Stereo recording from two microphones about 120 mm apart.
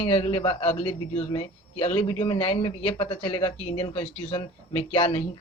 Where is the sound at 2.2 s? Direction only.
45° left (ahead or behind); by 5.0 s 60° left (ahead or behind).